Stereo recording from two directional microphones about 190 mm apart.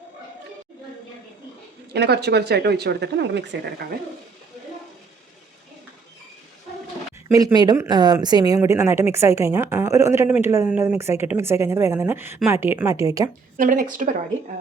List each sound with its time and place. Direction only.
1.9 s speech: 60° right (ahead or behind)
7.3 s speech: 20° right (ahead or behind)
13.6 s a woman's voice: 45° right (ahead or behind)